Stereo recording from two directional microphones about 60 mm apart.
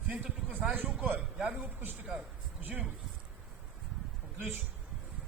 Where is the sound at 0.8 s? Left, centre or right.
Right.